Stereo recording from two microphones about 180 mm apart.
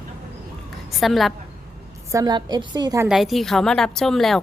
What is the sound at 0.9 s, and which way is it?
Speech, centre (ahead or behind).